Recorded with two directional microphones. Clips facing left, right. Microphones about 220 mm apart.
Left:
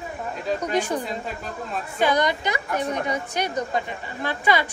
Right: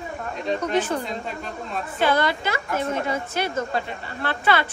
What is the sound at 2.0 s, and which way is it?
A woman's voice, 15° left (ahead or behind).